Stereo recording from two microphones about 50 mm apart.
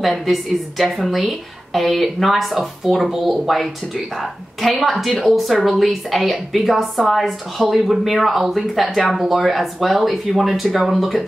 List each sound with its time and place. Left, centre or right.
0.0 s a woman's voice: centre